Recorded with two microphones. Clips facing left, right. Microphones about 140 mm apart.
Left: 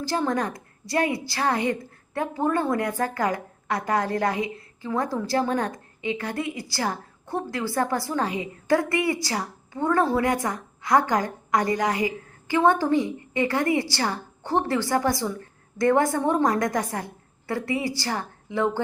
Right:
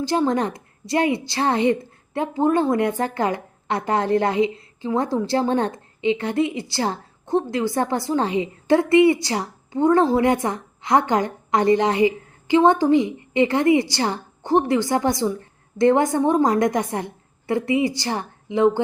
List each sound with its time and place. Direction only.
0.0 s a woman's voice: 20° right (ahead or behind)